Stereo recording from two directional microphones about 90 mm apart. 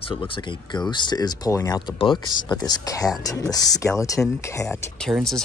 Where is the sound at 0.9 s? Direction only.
50° left (ahead or behind).